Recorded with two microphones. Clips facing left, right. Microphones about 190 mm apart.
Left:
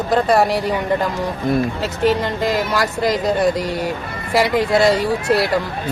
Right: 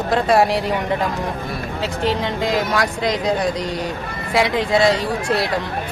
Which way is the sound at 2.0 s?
Centre (ahead or behind).